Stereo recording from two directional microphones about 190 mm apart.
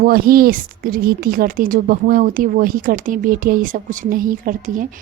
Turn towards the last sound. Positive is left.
turn(degrees=-45)  # may be behind; listen again after turning